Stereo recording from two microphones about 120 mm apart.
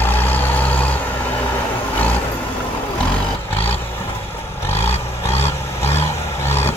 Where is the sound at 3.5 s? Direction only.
15° left (ahead or behind).